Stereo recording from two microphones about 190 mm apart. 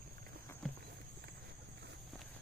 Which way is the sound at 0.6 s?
Centre (ahead or behind).